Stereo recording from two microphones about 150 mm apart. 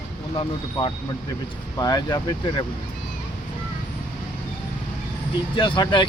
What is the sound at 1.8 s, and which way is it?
Speech, 25° left (ahead or behind).